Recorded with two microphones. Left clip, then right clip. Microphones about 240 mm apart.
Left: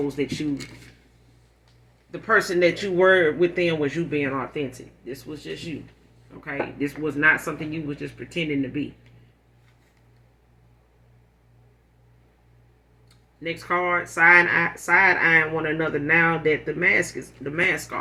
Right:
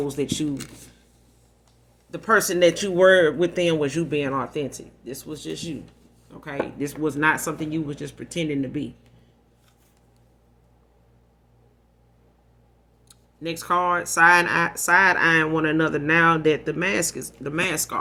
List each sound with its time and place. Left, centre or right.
0.2 s speech: right
2.0 s speech: right
13.4 s speech: right